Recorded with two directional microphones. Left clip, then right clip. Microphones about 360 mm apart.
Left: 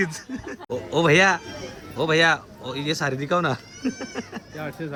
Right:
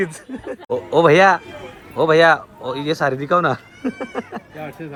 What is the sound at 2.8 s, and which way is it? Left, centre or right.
Speech, centre.